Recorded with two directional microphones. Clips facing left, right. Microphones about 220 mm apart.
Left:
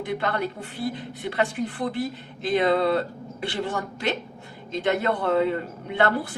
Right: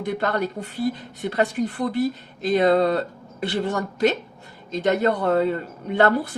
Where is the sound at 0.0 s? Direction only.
40° right (ahead or behind).